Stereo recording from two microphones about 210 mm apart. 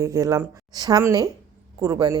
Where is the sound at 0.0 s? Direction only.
15° right (ahead or behind).